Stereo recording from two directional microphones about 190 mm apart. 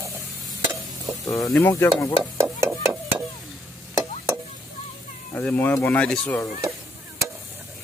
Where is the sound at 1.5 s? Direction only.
15° left (ahead or behind).